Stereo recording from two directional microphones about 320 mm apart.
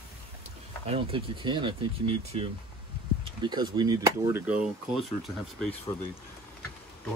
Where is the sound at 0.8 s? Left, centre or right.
Centre.